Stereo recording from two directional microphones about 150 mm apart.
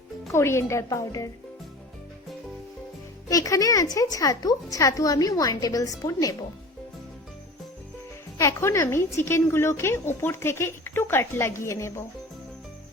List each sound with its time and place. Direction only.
0.3 s a woman's voice: 15° left (ahead or behind)
3.2 s a woman's voice: 20° left (ahead or behind)
8.4 s a woman's voice: 20° left (ahead or behind)